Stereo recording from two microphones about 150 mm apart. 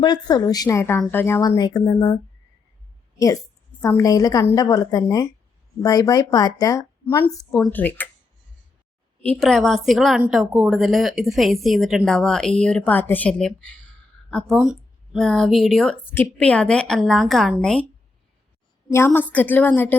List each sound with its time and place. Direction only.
0.0 s a woman's voice: 30° left (ahead or behind)
3.8 s a woman's voice: 20° left (ahead or behind)
9.2 s speech: 5° left (ahead or behind)
18.9 s a woman's voice: 15° left (ahead or behind)